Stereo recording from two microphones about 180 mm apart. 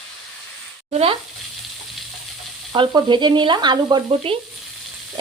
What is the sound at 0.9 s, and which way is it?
Frying, 35° right (ahead or behind).